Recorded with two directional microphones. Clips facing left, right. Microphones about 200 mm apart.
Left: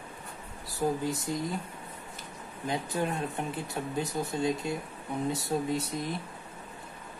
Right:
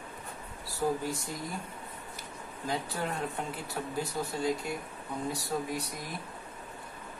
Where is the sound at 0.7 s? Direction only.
20° left (ahead or behind).